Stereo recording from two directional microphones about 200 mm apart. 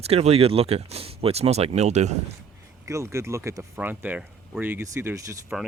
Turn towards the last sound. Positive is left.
turn(degrees=-15)  # may be behind; listen again after turning